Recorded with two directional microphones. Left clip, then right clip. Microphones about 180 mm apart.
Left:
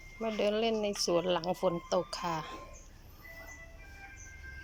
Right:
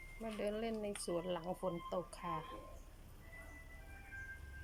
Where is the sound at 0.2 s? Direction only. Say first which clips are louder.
Left 11 dB; 15° left (ahead or behind).